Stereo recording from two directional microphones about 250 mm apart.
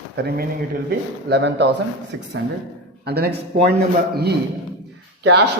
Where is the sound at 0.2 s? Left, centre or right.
Right.